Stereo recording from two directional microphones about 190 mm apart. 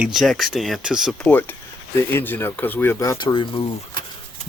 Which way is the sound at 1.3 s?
10° left (ahead or behind).